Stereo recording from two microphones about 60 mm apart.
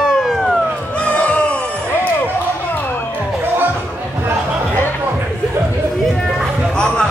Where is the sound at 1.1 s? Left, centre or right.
Centre.